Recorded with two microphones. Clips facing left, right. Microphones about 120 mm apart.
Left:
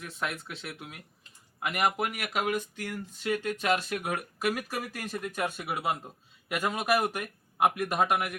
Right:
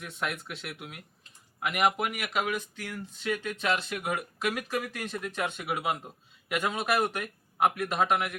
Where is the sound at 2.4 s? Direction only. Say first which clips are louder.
Left 2 dB; 45° left (ahead or behind).